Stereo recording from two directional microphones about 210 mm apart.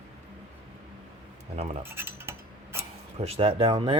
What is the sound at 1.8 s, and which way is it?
Cutlery, 10° right (ahead or behind).